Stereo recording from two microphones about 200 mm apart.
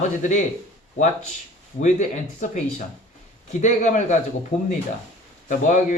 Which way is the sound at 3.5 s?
35° left (ahead or behind).